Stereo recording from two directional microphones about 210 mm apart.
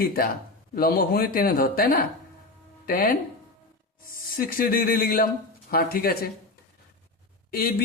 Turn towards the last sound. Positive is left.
turn(degrees=45)  # may be behind; listen again after turning